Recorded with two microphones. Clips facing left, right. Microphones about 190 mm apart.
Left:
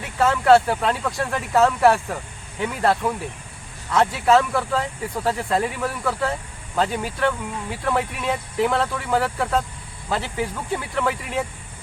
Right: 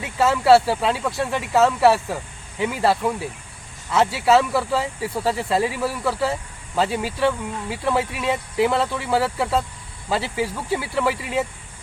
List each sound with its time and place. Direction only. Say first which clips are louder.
0.2 s speech: right 1 dB; 5° right (ahead or behind)